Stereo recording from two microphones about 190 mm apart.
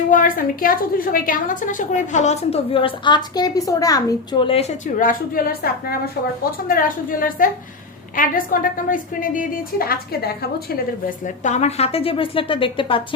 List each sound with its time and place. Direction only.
0.1 s a woman's voice: 45° left (ahead or behind); by 13.1 s 25° left (ahead or behind)